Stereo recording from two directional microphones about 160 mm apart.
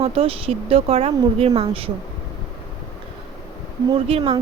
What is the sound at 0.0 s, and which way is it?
Speech, 35° right (ahead or behind).